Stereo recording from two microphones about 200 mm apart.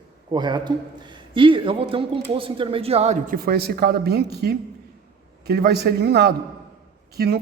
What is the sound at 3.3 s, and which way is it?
A man's voice, 50° right (ahead or behind).